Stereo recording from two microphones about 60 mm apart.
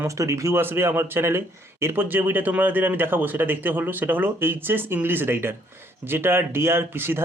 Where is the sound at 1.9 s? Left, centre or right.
Right.